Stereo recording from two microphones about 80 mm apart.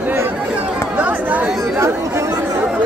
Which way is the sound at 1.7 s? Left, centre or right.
Right.